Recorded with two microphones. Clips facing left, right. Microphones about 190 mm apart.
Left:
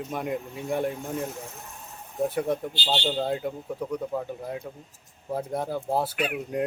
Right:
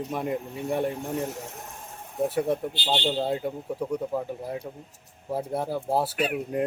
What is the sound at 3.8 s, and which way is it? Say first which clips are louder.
Speech: right 1 dB; 10° right (ahead or behind).